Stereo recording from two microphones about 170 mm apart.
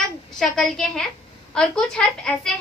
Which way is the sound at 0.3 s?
5° left (ahead or behind).